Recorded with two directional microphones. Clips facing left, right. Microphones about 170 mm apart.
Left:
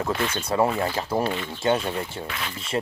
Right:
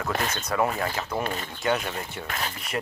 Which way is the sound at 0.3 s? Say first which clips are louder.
Left 5 dB; 30° left (ahead or behind).